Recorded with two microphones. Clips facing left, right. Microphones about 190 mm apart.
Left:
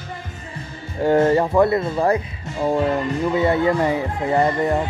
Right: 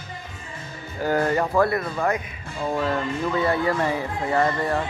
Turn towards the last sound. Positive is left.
turn(degrees=25)  # may be behind; listen again after turning